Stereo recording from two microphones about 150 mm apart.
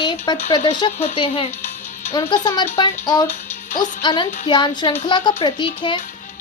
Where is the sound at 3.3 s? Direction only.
55° left (ahead or behind).